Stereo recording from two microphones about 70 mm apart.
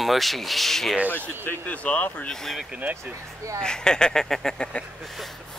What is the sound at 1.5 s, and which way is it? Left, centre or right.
Speech, left.